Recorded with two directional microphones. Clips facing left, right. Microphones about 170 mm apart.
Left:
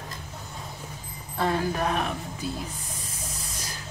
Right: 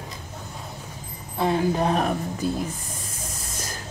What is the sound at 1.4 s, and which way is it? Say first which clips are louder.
Speech: right 4 dB; 20° right (ahead or behind).